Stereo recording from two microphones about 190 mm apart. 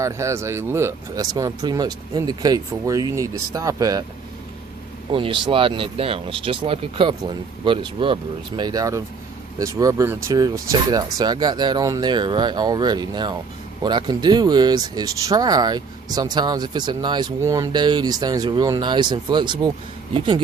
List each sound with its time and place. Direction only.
0.0 s speech: 15° right (ahead or behind)
5.1 s speech: 25° right (ahead or behind)